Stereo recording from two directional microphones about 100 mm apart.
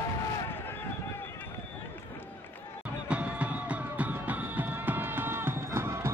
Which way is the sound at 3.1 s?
10° right (ahead or behind).